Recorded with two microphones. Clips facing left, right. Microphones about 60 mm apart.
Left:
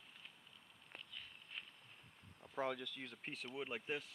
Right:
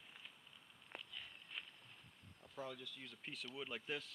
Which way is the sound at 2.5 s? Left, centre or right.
Left.